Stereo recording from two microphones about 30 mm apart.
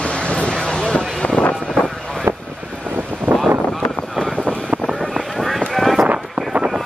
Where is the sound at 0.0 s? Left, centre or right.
Left.